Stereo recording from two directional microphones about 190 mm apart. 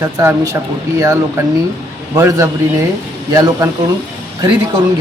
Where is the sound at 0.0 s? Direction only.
15° right (ahead or behind).